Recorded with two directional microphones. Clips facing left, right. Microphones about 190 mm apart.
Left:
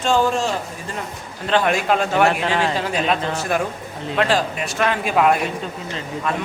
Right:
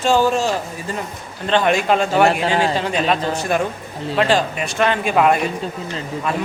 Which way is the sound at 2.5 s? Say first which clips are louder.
Right 2 dB; 35° right (ahead or behind).